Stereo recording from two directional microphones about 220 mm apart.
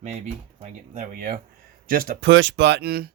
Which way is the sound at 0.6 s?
35° right (ahead or behind).